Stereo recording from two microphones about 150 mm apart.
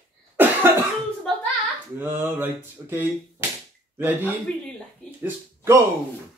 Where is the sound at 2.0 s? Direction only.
15° right (ahead or behind).